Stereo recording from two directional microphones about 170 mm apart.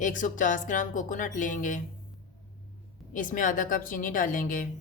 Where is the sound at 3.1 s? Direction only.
50° left (ahead or behind).